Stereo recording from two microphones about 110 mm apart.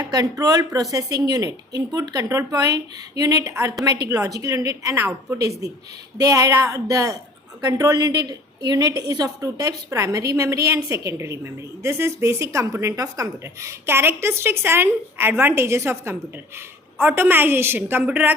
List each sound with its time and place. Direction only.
0.0 s a woman's voice: 30° right (ahead or behind); by 18.3 s 15° right (ahead or behind)